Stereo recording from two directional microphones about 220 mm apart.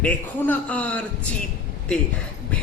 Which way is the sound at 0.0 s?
5° left (ahead or behind).